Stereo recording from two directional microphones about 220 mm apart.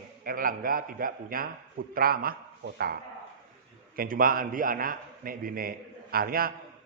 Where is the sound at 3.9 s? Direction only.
40° right (ahead or behind).